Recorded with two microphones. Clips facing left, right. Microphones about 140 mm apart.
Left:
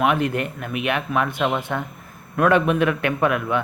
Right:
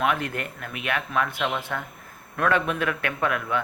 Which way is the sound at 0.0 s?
20° left (ahead or behind).